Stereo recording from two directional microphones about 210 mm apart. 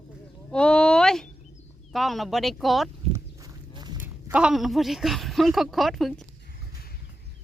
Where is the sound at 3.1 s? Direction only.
20° right (ahead or behind).